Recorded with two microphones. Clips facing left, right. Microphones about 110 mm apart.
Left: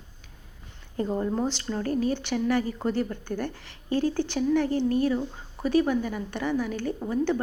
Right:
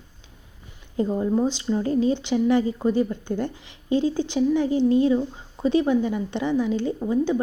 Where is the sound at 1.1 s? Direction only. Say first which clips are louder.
Right 5 dB; 10° right (ahead or behind).